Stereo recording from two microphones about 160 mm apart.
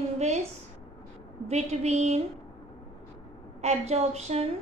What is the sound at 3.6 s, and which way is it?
Speech, 40° right (ahead or behind).